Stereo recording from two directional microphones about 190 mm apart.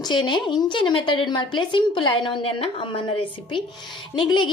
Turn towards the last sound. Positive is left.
turn(degrees=25)  # may be behind; listen again after turning